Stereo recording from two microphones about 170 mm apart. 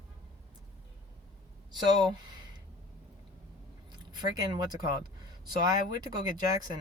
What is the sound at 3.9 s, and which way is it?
Speech, 25° right (ahead or behind).